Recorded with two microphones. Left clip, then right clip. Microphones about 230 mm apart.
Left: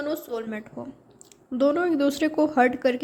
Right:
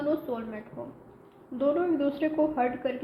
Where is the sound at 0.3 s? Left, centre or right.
Left.